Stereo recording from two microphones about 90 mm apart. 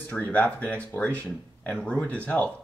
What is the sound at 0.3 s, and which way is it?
Speech, 15° left (ahead or behind).